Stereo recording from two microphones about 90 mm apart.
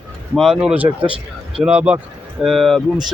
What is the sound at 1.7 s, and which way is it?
Speech, 15° right (ahead or behind).